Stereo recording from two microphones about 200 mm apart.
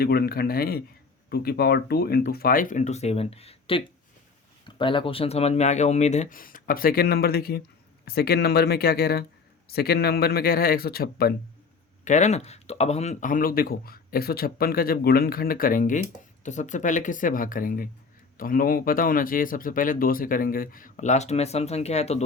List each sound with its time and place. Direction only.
0.0 s speech: 50° left (ahead or behind)
12.0 s speech: 35° left (ahead or behind)